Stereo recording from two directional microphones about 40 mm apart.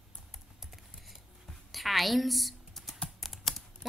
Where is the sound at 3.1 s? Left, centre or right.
Centre.